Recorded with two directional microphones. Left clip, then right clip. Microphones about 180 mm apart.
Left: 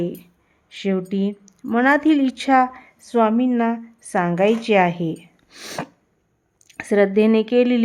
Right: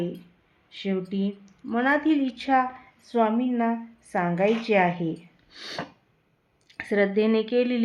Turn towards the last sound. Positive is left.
turn(degrees=45)  # may be behind; listen again after turning